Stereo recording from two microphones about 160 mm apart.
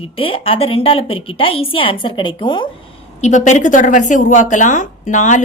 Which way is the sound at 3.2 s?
50° left (ahead or behind).